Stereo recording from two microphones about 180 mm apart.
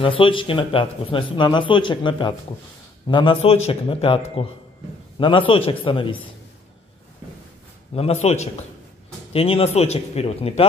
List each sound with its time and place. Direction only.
0.0 s speech: 30° left (ahead or behind)
7.9 s speech: 35° left (ahead or behind)